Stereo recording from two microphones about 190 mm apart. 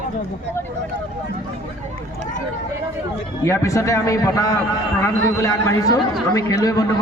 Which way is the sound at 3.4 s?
15° left (ahead or behind).